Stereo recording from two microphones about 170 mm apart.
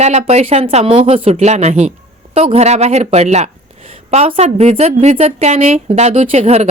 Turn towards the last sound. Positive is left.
turn(degrees=-40)  # may be behind; listen again after turning